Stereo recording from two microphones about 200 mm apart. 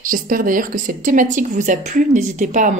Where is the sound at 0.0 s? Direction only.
45° right (ahead or behind).